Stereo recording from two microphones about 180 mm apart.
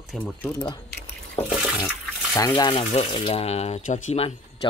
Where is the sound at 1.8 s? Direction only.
15° left (ahead or behind); by 4.3 s 35° left (ahead or behind).